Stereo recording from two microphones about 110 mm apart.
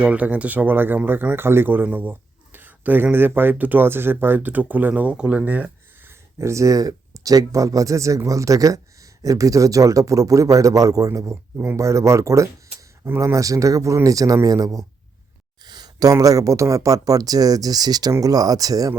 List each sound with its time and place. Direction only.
0.0 s speech: 15° right (ahead or behind)
6.4 s speech: 25° right (ahead or behind)